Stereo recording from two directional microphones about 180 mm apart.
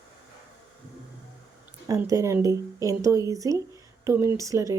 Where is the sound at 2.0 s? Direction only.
15° right (ahead or behind).